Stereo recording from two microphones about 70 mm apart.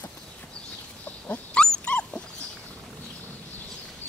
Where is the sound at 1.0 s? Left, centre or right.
Left.